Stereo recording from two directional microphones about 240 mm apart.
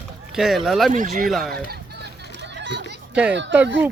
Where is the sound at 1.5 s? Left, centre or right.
Right.